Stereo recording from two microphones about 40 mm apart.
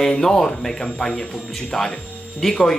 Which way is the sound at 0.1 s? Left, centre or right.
Centre.